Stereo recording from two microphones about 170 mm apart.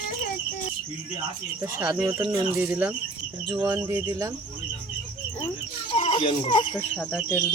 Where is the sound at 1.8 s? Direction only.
15° right (ahead or behind).